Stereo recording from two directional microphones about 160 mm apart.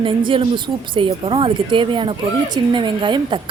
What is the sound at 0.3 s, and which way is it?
A woman's voice, 30° right (ahead or behind).